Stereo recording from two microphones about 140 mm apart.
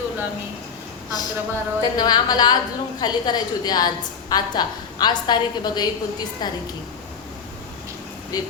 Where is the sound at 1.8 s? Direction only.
30° left (ahead or behind).